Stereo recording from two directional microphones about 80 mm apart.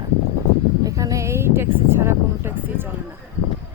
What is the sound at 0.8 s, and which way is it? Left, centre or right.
Speech, right.